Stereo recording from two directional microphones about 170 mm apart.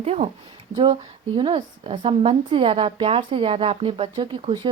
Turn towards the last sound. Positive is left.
turn(degrees=-30)  # may be behind; listen again after turning